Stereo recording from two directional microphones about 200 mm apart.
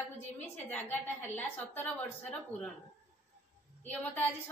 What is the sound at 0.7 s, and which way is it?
A woman's voice, 10° left (ahead or behind).